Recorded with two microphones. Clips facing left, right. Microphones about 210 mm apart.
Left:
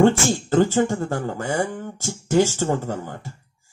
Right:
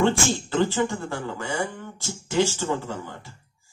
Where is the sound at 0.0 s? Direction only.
45° left (ahead or behind).